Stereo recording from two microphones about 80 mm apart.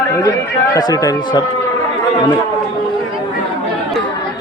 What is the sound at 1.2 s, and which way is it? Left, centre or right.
Speech, left.